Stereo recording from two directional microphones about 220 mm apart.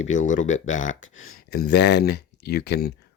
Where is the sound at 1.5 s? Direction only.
50° left (ahead or behind).